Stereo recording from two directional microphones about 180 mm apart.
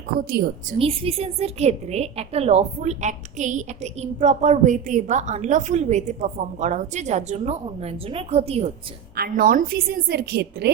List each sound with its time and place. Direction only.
0.2 s a woman's voice: 55° right (ahead or behind)
0.8 s a woman's voice: 35° right (ahead or behind)
9.1 s a woman's voice: 55° right (ahead or behind)